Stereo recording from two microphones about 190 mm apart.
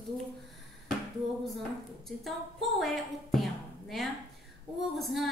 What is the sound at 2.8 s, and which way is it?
A woman's voice, centre (ahead or behind).